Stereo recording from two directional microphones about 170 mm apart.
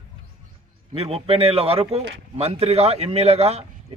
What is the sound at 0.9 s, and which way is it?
Speech, 35° right (ahead or behind).